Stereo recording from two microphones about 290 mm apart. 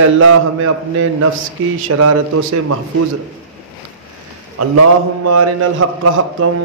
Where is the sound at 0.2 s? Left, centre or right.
Right.